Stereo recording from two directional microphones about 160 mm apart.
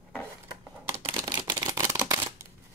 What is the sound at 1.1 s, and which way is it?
Camera, 25° right (ahead or behind).